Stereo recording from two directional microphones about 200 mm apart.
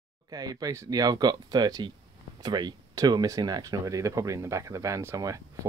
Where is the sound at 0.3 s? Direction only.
20° right (ahead or behind).